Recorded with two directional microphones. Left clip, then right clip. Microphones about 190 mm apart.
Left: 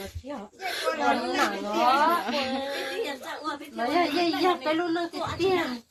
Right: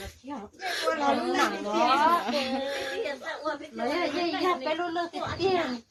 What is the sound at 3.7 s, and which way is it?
Speech, 55° left (ahead or behind).